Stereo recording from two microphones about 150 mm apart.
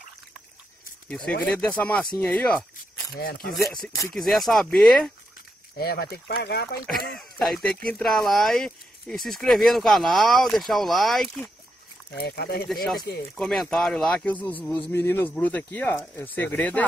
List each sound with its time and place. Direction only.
1.0 s speech: 5° left (ahead or behind)
2.1 s a sound: 5° left (ahead or behind)
3.2 s speech: 90° left
3.5 s speech: centre (ahead or behind)
5.8 s speech: 90° left
7.2 s speech: centre (ahead or behind)
11.2 s speech: 15° left (ahead or behind)
12.1 s speech: 90° left
12.6 s speech: centre (ahead or behind)